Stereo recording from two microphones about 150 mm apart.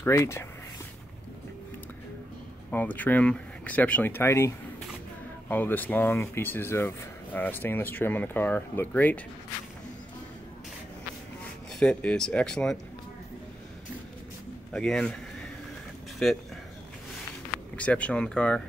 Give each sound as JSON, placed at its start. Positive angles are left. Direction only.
{"t": 0.0, "sound": "speech", "side_deg": 15}
{"t": 2.7, "sound": "speech", "side_deg": 10}
{"t": 11.8, "sound": "speech", "side_deg": 5}
{"t": 14.7, "sound": "speech", "side_deg": 5}
{"t": 16.2, "sound": "speech", "side_deg": 5}
{"t": 17.7, "sound": "speech", "side_deg": 10}